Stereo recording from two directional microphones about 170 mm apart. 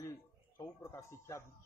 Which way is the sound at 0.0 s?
15° left (ahead or behind).